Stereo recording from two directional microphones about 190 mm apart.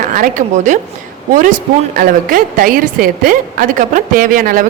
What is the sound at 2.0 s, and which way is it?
A woman's voice, 50° right (ahead or behind).